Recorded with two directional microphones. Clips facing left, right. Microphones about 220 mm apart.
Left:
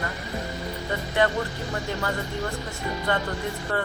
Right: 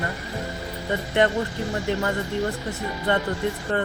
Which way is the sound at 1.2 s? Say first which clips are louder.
Right 2 dB; 20° right (ahead or behind).